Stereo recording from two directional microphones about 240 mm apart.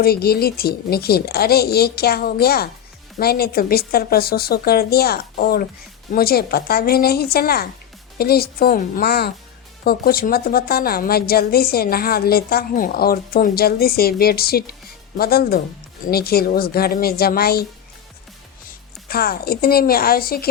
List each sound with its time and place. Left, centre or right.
0.0 s a woman's voice: left
19.0 s a woman's voice: left